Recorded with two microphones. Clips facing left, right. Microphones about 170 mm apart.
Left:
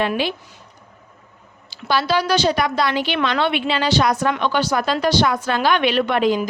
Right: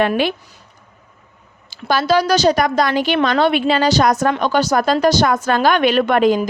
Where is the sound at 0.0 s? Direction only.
55° right (ahead or behind).